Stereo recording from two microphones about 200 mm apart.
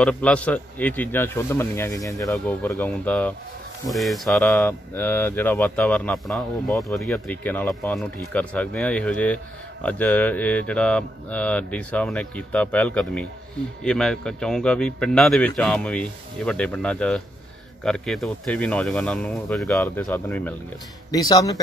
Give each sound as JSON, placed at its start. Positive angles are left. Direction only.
{"t": 0.0, "sound": "a man's voice", "side_deg": 5}